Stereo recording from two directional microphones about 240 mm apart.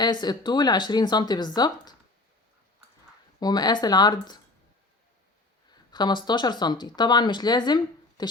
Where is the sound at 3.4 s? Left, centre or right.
Centre.